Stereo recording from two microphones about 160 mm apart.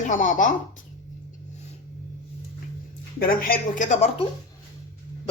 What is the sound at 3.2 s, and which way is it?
Speech, 65° left (ahead or behind).